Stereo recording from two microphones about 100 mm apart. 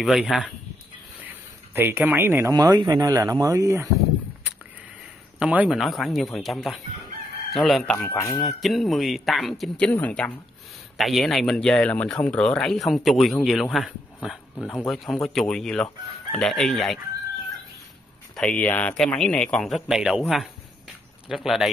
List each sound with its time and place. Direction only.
0.0 s speech: 5° right (ahead or behind)
1.2 s a sound: 20° right (ahead or behind)
2.5 s speech: 40° right (ahead or behind)
5.4 s a man's voice: 15° right (ahead or behind)
5.7 s speech: centre (ahead or behind)
8.0 s speech: 30° left (ahead or behind)
8.5 s speech: centre (ahead or behind)
9.8 s speech: 15° left (ahead or behind)
11.0 s speech: centre (ahead or behind)
18.3 s speech: 10° left (ahead or behind)